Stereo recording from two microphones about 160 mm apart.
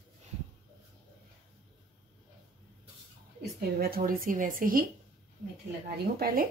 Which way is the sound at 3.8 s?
65° right (ahead or behind).